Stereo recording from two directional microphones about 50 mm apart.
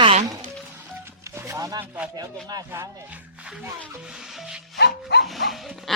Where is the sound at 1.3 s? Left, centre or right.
Right.